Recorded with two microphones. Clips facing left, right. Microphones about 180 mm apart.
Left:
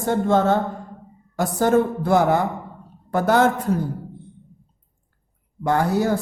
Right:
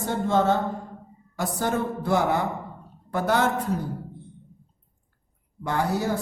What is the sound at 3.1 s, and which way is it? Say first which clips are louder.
Speech: left 5 dB; 45° left (ahead or behind).